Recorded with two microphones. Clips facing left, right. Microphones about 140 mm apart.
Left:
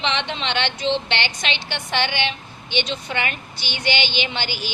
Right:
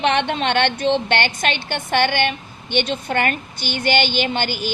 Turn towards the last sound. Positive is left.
turn(degrees=-50)  # may be behind; listen again after turning